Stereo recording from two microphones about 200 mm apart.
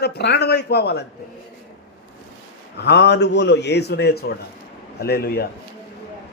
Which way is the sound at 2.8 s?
55° left (ahead or behind).